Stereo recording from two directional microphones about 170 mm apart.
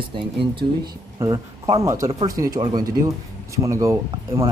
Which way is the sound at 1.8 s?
20° right (ahead or behind).